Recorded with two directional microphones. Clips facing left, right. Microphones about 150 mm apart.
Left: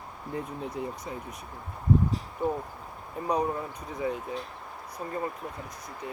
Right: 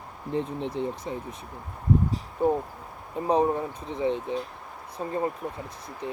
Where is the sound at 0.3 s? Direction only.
25° right (ahead or behind).